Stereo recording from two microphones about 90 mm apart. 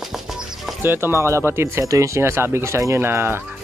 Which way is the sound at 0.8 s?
25° right (ahead or behind).